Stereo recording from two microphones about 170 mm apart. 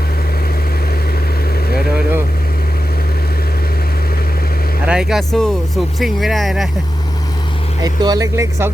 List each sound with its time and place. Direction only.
4.9 s speech: 5° right (ahead or behind)
7.8 s speech: 20° right (ahead or behind)